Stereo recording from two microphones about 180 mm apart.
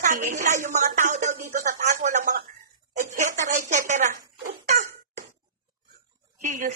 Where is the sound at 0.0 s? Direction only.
45° right (ahead or behind).